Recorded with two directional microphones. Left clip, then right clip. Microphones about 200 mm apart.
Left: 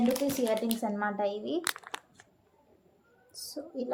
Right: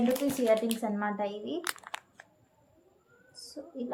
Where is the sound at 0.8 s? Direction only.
40° left (ahead or behind).